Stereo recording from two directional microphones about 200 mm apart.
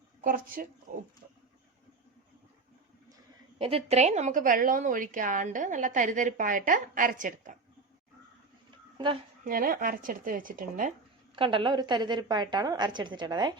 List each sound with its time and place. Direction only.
0.2 s speech: 45° right (ahead or behind)
3.6 s a woman's voice: 30° right (ahead or behind)
9.4 s speech: 45° right (ahead or behind)
11.3 s a woman's voice: 25° right (ahead or behind)